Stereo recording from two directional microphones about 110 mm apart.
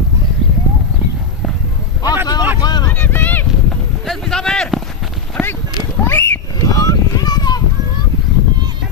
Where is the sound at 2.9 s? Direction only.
15° left (ahead or behind).